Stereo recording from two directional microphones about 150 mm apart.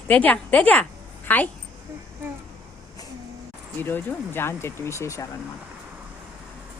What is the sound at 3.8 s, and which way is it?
A woman's voice, 15° left (ahead or behind).